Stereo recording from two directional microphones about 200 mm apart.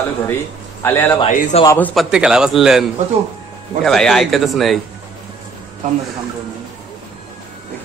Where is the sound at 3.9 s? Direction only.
Centre (ahead or behind).